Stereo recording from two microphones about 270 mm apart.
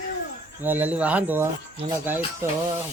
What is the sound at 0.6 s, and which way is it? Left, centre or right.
Speech, centre.